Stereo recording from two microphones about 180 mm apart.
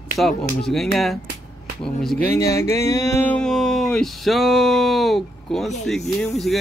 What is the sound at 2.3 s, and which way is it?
Music, 15° left (ahead or behind).